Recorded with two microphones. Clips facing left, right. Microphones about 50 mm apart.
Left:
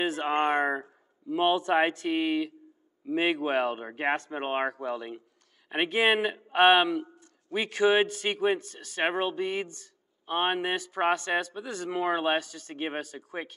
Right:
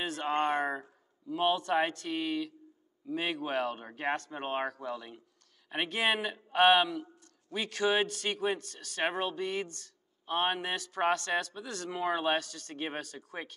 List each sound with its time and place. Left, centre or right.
0.2 s a man's voice: left